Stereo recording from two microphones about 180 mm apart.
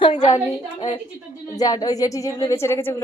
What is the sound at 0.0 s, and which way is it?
Speech, 40° left (ahead or behind).